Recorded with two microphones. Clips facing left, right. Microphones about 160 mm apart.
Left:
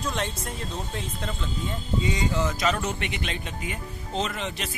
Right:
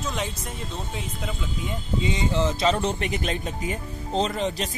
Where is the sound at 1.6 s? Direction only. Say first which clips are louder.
Right 1 dB; 20° right (ahead or behind).